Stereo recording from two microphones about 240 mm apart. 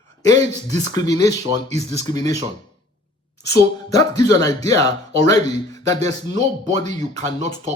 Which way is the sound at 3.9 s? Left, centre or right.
Centre.